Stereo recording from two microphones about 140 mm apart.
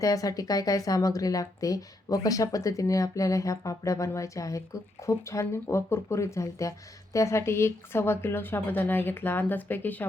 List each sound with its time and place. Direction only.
0.0 s speech: 25° left (ahead or behind)